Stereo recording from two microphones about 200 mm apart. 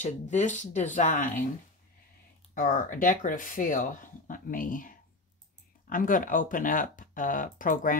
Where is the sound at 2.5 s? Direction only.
45° left (ahead or behind).